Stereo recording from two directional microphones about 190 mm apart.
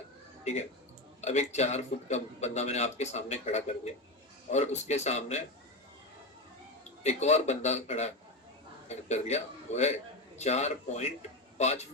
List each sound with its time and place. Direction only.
1.2 s a man's voice: 35° left (ahead or behind)
7.0 s a man's voice: 35° left (ahead or behind)